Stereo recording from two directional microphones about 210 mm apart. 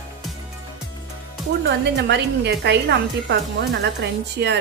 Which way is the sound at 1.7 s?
55° right (ahead or behind).